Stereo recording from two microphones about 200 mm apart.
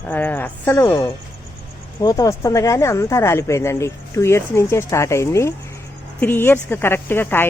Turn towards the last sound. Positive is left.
turn(degrees=10)  # may be behind; listen again after turning